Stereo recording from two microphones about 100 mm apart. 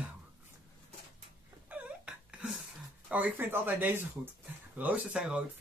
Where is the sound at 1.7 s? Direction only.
10° right (ahead or behind).